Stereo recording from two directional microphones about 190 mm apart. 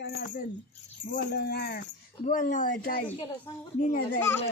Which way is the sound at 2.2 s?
45° left (ahead or behind).